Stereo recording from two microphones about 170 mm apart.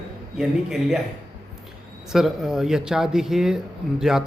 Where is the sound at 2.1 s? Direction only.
Centre (ahead or behind).